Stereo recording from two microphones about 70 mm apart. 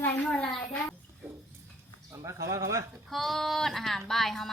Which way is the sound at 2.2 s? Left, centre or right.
Right.